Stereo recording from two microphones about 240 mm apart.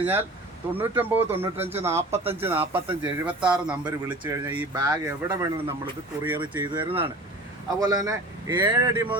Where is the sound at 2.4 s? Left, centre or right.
Centre.